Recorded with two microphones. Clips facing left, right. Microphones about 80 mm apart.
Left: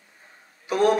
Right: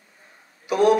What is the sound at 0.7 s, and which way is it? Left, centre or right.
Speech, left.